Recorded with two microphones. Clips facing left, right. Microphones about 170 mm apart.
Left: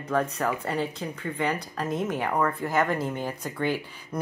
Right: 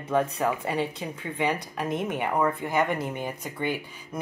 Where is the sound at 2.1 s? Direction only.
5° right (ahead or behind).